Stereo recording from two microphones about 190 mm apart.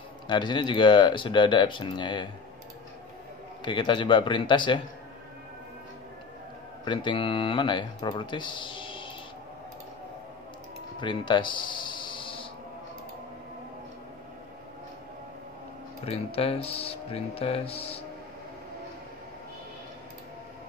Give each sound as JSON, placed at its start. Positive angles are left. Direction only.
{"t": 0.3, "sound": "speech", "side_deg": 25}
{"t": 3.6, "sound": "speech", "side_deg": 25}
{"t": 6.8, "sound": "speech", "side_deg": 25}
{"t": 11.0, "sound": "music", "side_deg": 25}
{"t": 16.1, "sound": "speech", "side_deg": 30}